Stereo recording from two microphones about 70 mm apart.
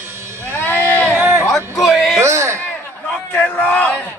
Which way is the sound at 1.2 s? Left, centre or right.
Right.